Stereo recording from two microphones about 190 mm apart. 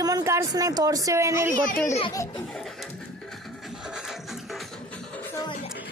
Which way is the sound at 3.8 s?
5° right (ahead or behind).